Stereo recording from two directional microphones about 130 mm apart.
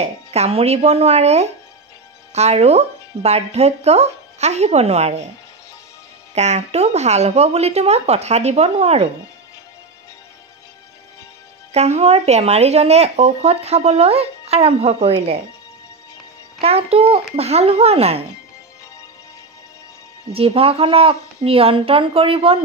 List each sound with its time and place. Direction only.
0.0 s speech: 55° right (ahead or behind)
6.3 s speech: 60° right (ahead or behind)
11.7 s speech: 55° right (ahead or behind)
16.6 s speech: 50° right (ahead or behind)
20.3 s speech: 50° right (ahead or behind)